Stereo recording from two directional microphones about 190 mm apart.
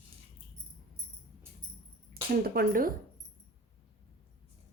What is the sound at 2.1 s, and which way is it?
Speech, 50° right (ahead or behind).